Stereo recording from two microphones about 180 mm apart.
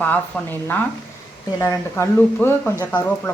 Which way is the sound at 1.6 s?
15° left (ahead or behind).